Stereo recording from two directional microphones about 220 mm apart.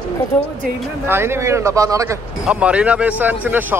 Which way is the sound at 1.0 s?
10° right (ahead or behind).